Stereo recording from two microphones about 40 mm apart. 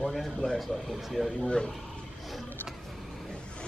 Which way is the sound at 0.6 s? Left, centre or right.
Centre.